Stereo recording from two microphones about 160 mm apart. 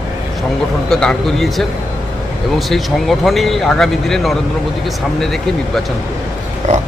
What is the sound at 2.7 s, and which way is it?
Speech, centre (ahead or behind).